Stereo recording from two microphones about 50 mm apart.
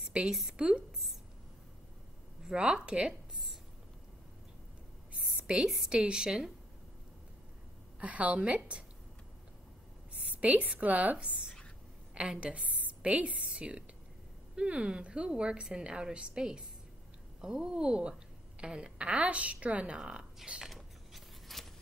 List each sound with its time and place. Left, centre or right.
0.0 s a sound: right
0.3 s a woman's voice: centre
0.6 s a woman's voice: right
2.4 s speech: centre
5.3 s a sound: centre
5.9 s speech: centre
8.0 s a woman's voice: right
10.1 s a sound: right
10.8 s a woman's voice: right
11.1 s a woman's voice: centre
20.6 s scissors: centre